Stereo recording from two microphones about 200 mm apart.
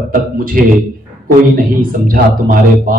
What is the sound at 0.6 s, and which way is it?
A man's voice, 45° right (ahead or behind).